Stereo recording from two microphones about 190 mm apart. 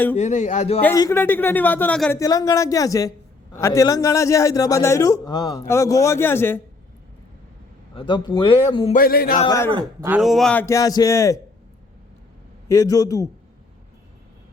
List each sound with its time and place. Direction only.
0.2 s a man's voice: 40° left (ahead or behind)
0.9 s a man's voice: 15° left (ahead or behind)
2.1 s a man's voice: 20° left (ahead or behind)
7.9 s speech: 25° left (ahead or behind)
8.9 s a man's voice: 50° left (ahead or behind)
10.2 s a man's voice: centre (ahead or behind); by 11.3 s 15° left (ahead or behind)
12.6 s a man's voice: 15° left (ahead or behind)